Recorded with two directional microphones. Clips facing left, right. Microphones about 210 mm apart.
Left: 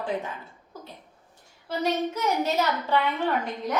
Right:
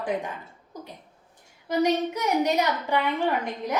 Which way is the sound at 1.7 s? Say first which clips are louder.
Right 3 dB; 15° right (ahead or behind).